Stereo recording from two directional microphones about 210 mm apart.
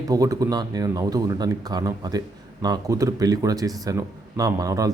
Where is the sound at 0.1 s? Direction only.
15° right (ahead or behind).